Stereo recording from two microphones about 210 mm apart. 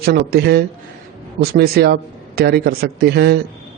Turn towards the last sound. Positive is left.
turn(degrees=-50)  # may be behind; listen again after turning